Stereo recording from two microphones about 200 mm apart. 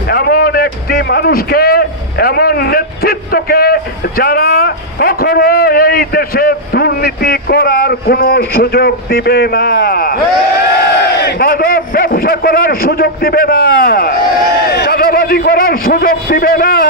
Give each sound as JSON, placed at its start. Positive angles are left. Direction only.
{"t": 0.1, "sound": "a sound", "side_deg": 50}
{"t": 4.2, "sound": "a man's voice", "side_deg": 50}
{"t": 11.2, "sound": "a man's voice", "side_deg": 50}